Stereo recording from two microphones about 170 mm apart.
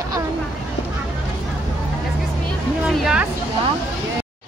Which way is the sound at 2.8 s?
5° right (ahead or behind).